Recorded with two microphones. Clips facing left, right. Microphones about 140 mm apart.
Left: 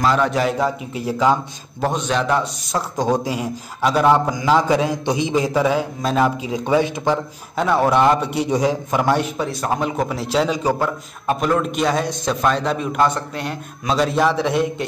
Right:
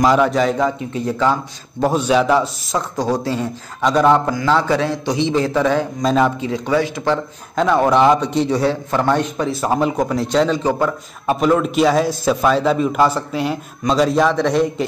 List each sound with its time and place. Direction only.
0.0 s a man's voice: 10° right (ahead or behind)
0.3 s a man's voice: 5° left (ahead or behind)
1.8 s a man's voice: 5° right (ahead or behind)
3.0 s a man's voice: 15° left (ahead or behind)
4.3 s a man's voice: 15° left (ahead or behind)
6.5 s a man's voice: 20° left (ahead or behind)
7.5 s a man's voice: 5° left (ahead or behind)